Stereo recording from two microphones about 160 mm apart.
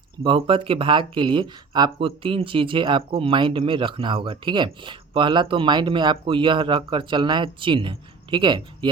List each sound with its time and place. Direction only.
0.2 s speech: 35° right (ahead or behind)